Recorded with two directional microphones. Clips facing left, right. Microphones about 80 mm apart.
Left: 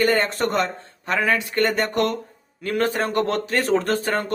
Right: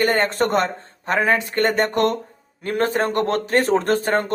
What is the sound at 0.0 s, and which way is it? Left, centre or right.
Speech, right.